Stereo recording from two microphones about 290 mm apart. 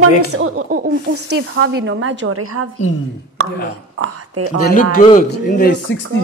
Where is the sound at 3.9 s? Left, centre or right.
Right.